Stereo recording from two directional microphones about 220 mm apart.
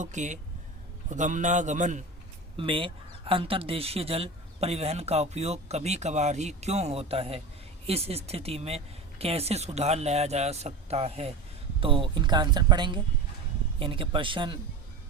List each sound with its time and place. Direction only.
0.0 s a man's voice: 35° right (ahead or behind)
2.6 s speech: 25° right (ahead or behind)